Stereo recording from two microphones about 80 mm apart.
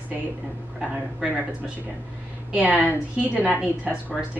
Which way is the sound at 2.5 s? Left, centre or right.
Centre.